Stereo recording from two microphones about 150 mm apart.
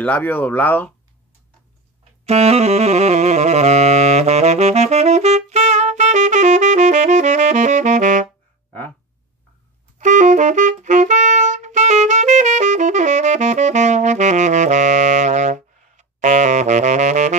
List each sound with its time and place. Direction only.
0.0 s speech: 10° left (ahead or behind)
2.2 s saxophone: 45° right (ahead or behind)
9.9 s saxophone: 55° right (ahead or behind)